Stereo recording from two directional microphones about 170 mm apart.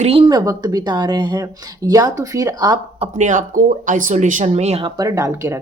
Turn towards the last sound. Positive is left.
turn(degrees=-15)  # may be behind; listen again after turning